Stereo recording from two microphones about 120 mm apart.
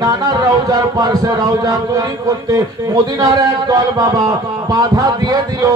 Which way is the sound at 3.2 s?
35° right (ahead or behind).